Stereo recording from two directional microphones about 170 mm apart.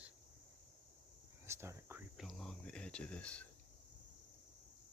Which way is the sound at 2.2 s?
Centre (ahead or behind).